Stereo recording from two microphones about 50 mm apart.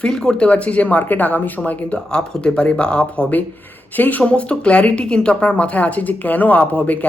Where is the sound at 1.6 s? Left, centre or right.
Left.